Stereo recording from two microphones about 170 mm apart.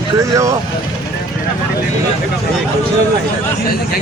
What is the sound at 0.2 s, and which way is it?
Speech, 20° right (ahead or behind).